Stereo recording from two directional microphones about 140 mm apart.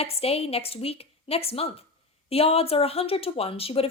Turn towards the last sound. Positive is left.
turn(degrees=45)  # may be behind; listen again after turning